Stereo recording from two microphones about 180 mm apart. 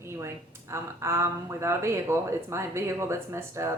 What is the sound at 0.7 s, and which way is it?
A woman's voice, 15° right (ahead or behind).